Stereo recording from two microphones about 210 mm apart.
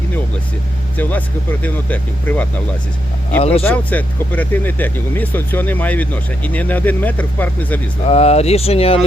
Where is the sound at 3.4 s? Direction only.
30° left (ahead or behind).